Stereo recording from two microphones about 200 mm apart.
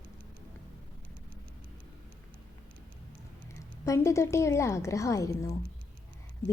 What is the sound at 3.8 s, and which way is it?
A woman's voice, 15° left (ahead or behind).